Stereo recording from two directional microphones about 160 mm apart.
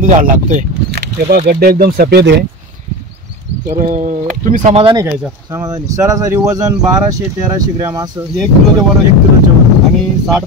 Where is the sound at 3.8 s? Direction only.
55° right (ahead or behind).